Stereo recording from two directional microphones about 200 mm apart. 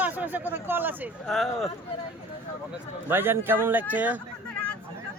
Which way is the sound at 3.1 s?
10° right (ahead or behind).